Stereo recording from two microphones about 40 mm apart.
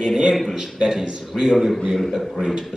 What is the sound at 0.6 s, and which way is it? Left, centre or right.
A man's voice, centre.